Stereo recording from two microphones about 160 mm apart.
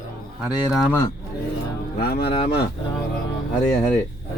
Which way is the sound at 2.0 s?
75° left (ahead or behind).